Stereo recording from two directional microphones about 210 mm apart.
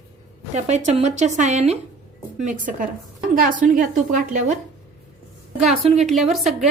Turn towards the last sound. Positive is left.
turn(degrees=0)  # may be behind; listen again after turning